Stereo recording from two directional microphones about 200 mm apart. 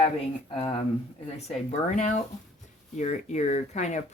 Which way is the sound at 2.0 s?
35° left (ahead or behind).